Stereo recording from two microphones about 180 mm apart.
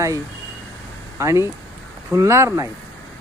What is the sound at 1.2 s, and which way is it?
Speech, 15° right (ahead or behind).